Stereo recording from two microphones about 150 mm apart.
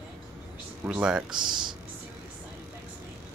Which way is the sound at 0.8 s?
5° right (ahead or behind).